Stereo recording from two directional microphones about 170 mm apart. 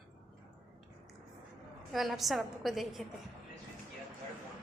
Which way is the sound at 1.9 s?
Centre (ahead or behind).